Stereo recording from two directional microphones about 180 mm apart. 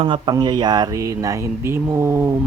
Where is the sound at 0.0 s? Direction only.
25° right (ahead or behind).